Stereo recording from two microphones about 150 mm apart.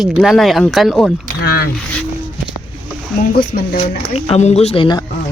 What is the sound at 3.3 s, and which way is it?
Speech, 85° left.